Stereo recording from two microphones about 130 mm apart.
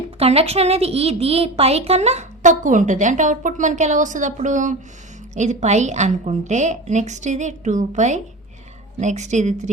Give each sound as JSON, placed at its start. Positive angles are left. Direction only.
{"t": 0.2, "sound": "a child's voice", "side_deg": -50}
{"t": 5.3, "sound": "a child's voice", "side_deg": -65}